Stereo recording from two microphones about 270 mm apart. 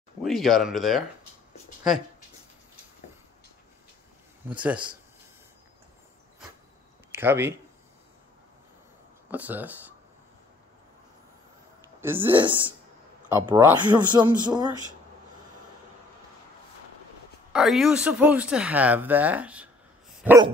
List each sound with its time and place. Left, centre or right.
0.2 s speech: centre
4.5 s speech: centre
7.1 s speech: centre
9.3 s speech: centre
12.0 s speech: centre
17.5 s speech: centre